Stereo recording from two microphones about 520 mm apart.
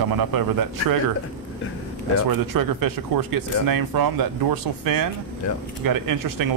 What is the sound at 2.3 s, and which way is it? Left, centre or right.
A man's voice, right.